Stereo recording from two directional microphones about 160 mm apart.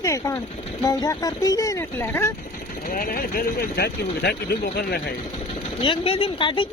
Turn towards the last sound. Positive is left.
turn(degrees=30)  # may be behind; listen again after turning